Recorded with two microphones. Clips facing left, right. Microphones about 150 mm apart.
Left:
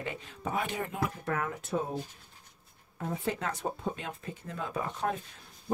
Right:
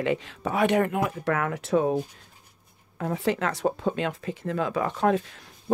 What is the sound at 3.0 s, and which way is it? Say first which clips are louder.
Speech: right 7 dB; 85° right.